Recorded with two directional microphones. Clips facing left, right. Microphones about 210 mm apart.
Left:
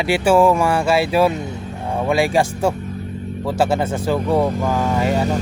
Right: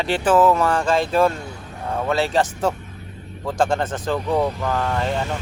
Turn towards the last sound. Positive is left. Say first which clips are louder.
# left 4 dB
turn(degrees=10)  # may be behind; listen again after turning